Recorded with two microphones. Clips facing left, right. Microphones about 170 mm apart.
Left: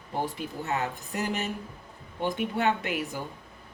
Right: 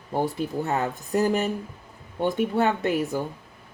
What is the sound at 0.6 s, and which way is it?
Speech, 45° right (ahead or behind).